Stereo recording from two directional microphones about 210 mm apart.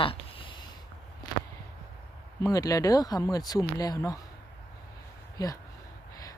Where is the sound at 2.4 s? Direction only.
15° left (ahead or behind).